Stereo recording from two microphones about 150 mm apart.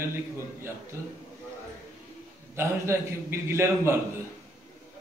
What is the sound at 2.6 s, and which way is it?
A man's voice, 15° right (ahead or behind).